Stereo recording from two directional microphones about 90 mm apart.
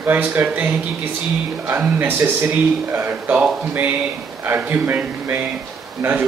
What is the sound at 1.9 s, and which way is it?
Speech, 25° right (ahead or behind).